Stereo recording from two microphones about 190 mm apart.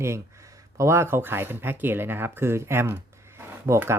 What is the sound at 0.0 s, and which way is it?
Speech, 15° right (ahead or behind).